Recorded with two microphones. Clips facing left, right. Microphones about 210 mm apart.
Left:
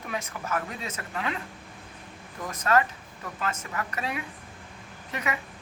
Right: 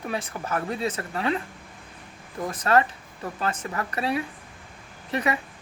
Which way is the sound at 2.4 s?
30° right (ahead or behind).